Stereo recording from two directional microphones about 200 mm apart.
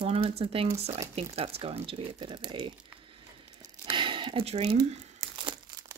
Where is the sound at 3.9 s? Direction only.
25° right (ahead or behind).